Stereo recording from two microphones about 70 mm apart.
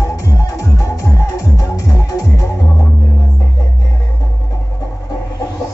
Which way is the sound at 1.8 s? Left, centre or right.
Left.